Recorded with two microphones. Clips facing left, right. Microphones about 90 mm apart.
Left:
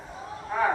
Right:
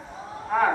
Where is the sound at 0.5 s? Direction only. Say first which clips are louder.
Right 4 dB; 60° right (ahead or behind).